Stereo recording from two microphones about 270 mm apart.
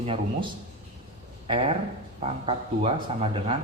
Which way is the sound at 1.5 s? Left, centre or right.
Centre.